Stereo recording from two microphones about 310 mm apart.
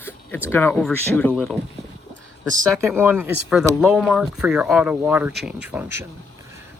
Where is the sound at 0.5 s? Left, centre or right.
Centre.